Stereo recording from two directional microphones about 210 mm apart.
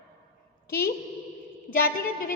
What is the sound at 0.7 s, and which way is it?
Speech, 45° left (ahead or behind).